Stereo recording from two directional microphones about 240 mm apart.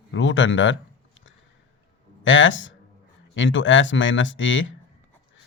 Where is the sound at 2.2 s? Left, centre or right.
Left.